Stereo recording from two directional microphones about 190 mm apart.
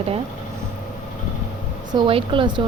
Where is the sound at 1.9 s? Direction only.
25° right (ahead or behind).